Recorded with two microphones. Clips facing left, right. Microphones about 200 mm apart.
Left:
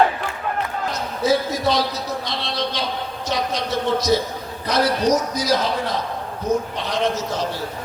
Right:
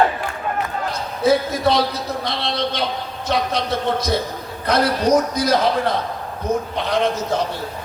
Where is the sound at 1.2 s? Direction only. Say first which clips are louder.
Right 3 dB; 60° right (ahead or behind).